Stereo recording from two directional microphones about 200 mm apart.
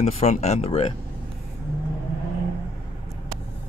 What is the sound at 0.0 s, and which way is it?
Speech, 35° left (ahead or behind).